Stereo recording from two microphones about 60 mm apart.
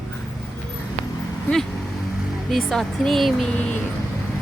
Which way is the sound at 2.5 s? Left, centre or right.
Centre.